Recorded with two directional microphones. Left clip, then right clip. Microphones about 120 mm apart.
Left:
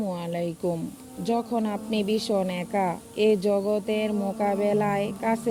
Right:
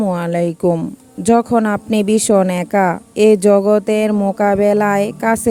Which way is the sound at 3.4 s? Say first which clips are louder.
Right 13 dB; 75° right (ahead or behind).